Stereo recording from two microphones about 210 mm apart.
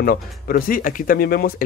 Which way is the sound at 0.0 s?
45° left (ahead or behind).